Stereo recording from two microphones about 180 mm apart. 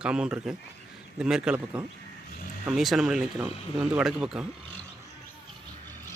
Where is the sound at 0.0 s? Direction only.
5° right (ahead or behind).